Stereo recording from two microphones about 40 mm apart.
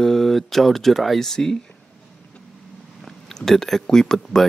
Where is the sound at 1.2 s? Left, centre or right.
Centre.